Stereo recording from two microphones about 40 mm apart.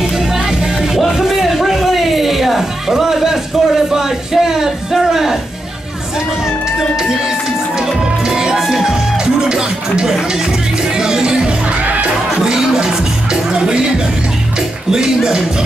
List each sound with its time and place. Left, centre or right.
1.1 s music: centre
7.8 s music: centre
9.2 s music: centre
11.8 s music: right
12.4 s music: centre
14.9 s speech: centre